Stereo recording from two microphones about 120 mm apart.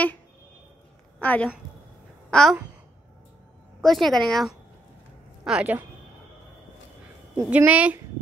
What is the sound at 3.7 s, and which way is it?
Speech, centre (ahead or behind).